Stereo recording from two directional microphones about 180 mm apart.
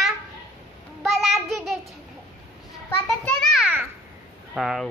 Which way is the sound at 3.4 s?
Centre (ahead or behind).